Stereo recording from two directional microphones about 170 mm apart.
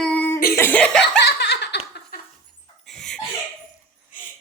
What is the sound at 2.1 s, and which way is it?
Dog, 65° left (ahead or behind).